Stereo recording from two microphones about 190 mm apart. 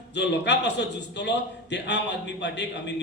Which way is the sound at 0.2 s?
65° left (ahead or behind).